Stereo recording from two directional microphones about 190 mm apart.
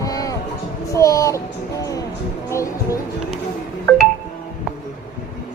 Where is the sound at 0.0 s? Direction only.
20° left (ahead or behind).